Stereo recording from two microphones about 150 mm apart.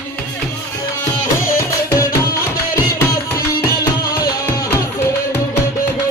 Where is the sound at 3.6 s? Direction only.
20° left (ahead or behind).